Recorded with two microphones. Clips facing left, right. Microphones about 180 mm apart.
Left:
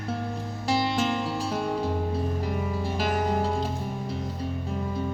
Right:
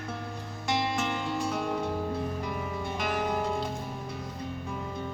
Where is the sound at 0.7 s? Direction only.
35° left (ahead or behind).